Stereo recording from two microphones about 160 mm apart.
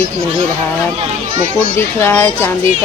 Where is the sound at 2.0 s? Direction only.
15° left (ahead or behind).